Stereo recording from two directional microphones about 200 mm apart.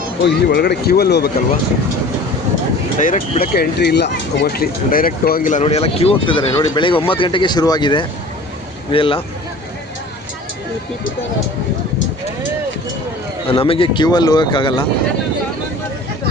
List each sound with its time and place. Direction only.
0.3 s speech: 55° left (ahead or behind)
3.0 s speech: 35° left (ahead or behind)
3.5 s speech: 50° left (ahead or behind); by 9.2 s 25° left (ahead or behind)
13.5 s speech: 25° left (ahead or behind)